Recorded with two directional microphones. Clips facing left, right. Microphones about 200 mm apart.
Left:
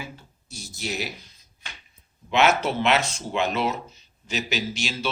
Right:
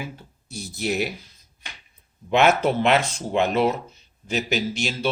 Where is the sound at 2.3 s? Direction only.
55° right (ahead or behind).